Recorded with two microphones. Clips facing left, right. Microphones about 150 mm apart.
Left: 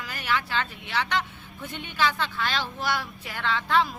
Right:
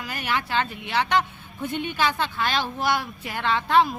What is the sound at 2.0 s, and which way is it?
Speech, 15° right (ahead or behind).